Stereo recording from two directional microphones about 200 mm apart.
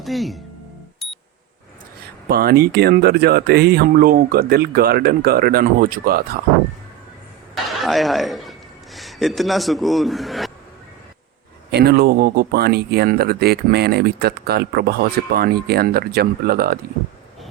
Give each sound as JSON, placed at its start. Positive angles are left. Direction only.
{"t": 0.0, "sound": "speech", "side_deg": 0}
{"t": 1.0, "sound": "alarm clock", "side_deg": 0}
{"t": 2.2, "sound": "speech", "side_deg": -50}
{"t": 7.5, "sound": "chuckle", "side_deg": 0}
{"t": 11.7, "sound": "speech", "side_deg": -50}